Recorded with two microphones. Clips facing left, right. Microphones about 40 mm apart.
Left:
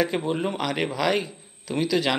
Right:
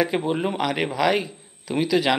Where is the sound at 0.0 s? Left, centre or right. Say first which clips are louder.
Right 2 dB; centre.